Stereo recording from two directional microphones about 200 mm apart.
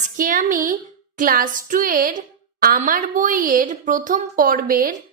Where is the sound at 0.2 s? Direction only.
40° right (ahead or behind).